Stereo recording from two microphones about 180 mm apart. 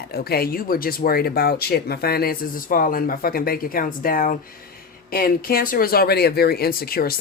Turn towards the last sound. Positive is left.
turn(degrees=55)  # may be behind; listen again after turning